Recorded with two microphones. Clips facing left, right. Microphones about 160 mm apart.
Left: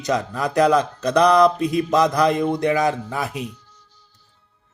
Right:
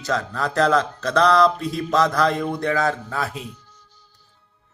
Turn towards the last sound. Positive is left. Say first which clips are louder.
# left 2 dB
turn(degrees=15)  # may be behind; listen again after turning